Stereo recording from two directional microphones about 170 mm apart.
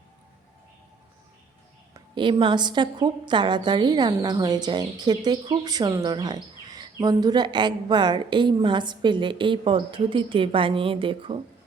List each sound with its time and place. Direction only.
1.9 s a woman's voice: 30° right (ahead or behind)